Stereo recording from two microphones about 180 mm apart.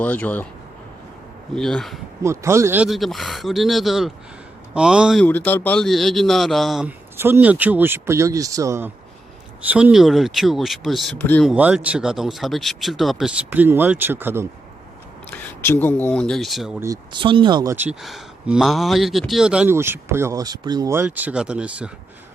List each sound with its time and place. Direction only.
0.0 s speech: 10° left (ahead or behind)
1.5 s speech: centre (ahead or behind)
2.2 s speech: 15° right (ahead or behind)
5.2 s speech: 10° left (ahead or behind)
11.2 s speech: 10° left (ahead or behind)
11.4 s speech: 5° right (ahead or behind)
15.3 s speech: 10° left (ahead or behind)
16.8 s speech: 20° right (ahead or behind)
17.7 s speech: 5° right (ahead or behind)